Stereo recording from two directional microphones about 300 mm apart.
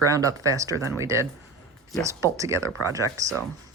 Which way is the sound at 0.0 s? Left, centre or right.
Centre.